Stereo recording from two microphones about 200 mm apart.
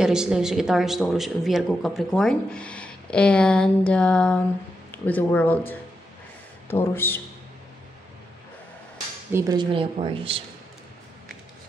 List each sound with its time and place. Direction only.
0.0 s speech: 5° right (ahead or behind)
6.7 s speech: 10° left (ahead or behind)
9.3 s a woman's voice: 15° right (ahead or behind)